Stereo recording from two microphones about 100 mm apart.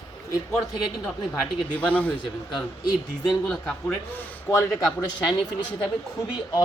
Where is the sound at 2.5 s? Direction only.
45° left (ahead or behind).